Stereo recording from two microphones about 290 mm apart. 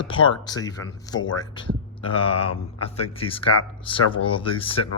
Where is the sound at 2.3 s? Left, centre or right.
Left.